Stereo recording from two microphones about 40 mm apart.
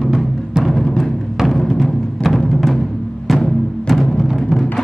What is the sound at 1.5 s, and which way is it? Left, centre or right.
Music, centre.